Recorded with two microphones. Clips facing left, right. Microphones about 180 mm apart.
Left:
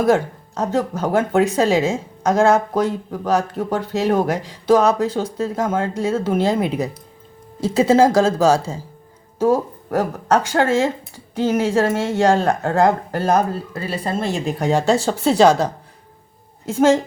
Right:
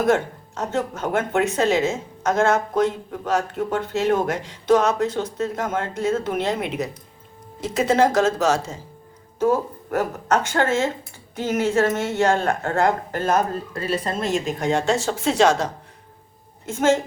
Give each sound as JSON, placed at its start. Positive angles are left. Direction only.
{"t": 0.0, "sound": "speech", "side_deg": 35}